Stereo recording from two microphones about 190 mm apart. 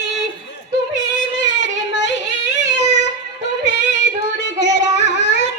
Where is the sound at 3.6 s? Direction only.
70° left (ahead or behind).